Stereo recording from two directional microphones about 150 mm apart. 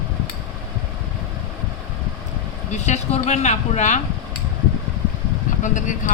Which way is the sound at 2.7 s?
50° left (ahead or behind).